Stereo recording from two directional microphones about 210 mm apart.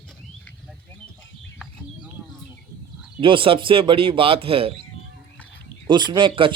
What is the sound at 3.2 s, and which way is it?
Speech, 25° right (ahead or behind).